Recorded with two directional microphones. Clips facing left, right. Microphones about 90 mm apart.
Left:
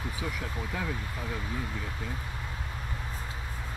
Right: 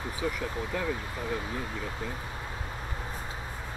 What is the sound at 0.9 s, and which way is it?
Speech, 20° right (ahead or behind).